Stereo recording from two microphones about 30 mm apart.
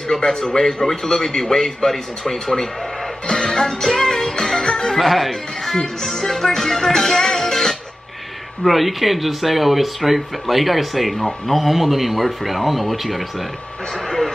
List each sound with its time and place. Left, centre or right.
0.1 s a man's voice: left
3.4 s music: centre
4.9 s speech: centre
5.8 s music: centre
8.6 s speech: centre
14.0 s vehicle: centre